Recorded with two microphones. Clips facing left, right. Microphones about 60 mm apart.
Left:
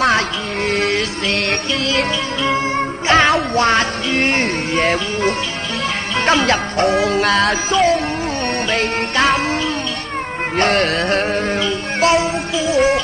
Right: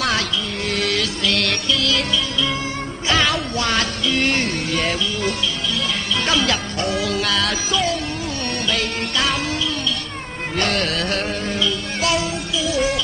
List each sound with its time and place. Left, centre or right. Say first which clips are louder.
0.7 s music: left 4 dB; left
10.6 s music: left 6 dB; left